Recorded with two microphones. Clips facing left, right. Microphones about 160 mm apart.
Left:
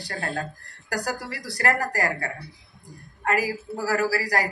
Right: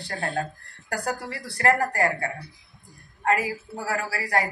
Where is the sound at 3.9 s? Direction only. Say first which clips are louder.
Left 7 dB; 35° left (ahead or behind).